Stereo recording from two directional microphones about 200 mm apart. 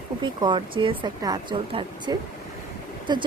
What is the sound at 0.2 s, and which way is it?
Speech, 25° right (ahead or behind).